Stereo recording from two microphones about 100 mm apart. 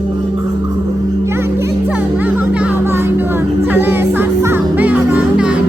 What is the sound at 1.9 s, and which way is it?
Music, 15° right (ahead or behind).